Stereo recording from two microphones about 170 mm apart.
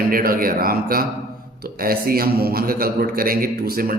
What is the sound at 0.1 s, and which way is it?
A man's voice, 60° right (ahead or behind).